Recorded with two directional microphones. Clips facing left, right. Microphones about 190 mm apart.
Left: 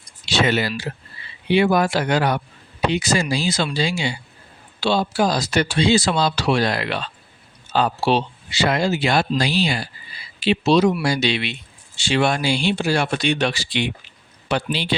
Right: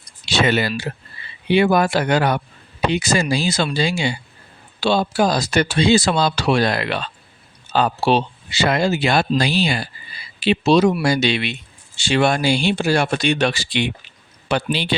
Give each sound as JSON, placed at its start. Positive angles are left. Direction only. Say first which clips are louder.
{"t": 0.3, "sound": "speech", "louder": "right 1 dB", "side_deg": -55}